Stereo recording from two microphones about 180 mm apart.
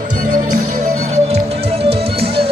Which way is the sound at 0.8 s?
35° right (ahead or behind).